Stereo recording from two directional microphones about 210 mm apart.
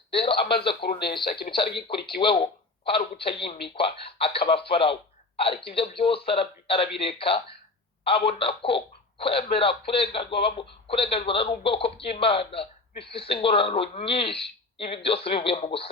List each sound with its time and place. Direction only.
0.1 s speech: 25° left (ahead or behind)
0.8 s speech: 50° left (ahead or behind)
1.5 s speech: 25° left (ahead or behind)